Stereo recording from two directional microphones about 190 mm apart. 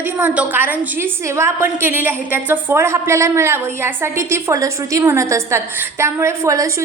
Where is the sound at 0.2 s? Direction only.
10° right (ahead or behind).